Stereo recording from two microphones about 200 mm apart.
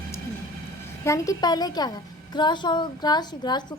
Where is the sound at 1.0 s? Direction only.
15° left (ahead or behind).